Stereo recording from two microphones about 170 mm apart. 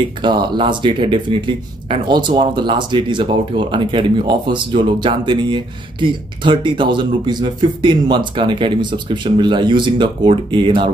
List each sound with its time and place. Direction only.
0.0 s speech: 25° right (ahead or behind)